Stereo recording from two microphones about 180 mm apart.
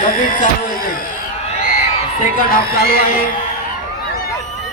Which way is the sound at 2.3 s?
55° left (ahead or behind).